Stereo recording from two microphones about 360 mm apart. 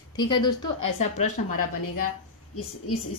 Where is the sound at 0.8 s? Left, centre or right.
Left.